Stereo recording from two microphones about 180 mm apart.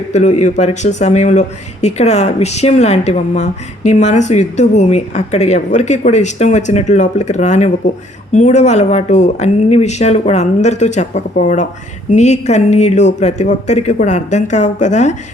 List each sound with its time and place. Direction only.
0.1 s speech: 40° left (ahead or behind)